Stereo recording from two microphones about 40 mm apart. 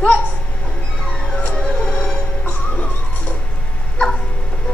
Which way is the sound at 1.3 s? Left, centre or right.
Left.